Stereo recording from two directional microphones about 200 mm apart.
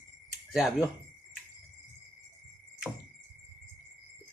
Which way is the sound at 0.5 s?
5° right (ahead or behind).